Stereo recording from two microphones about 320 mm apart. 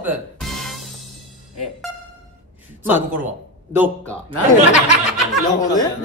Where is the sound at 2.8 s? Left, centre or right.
Centre.